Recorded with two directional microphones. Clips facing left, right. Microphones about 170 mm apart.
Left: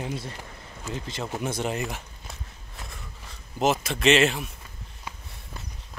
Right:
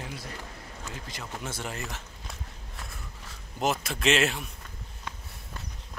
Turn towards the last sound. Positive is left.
turn(degrees=0)  # may be behind; listen again after turning